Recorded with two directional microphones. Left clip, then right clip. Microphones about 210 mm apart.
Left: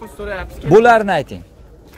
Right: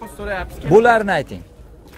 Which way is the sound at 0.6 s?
20° left (ahead or behind).